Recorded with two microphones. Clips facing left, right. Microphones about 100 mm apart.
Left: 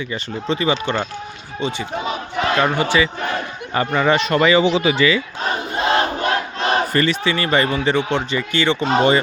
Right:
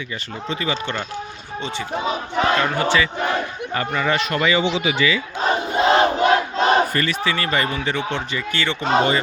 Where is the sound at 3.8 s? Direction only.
25° left (ahead or behind).